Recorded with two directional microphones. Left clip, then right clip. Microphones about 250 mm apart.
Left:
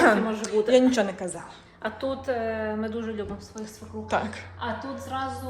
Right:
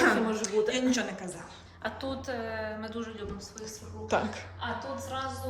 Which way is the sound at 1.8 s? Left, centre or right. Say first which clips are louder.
Left 6 dB; left.